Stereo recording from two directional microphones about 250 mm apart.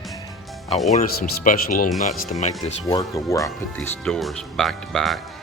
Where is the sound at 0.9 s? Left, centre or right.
Left.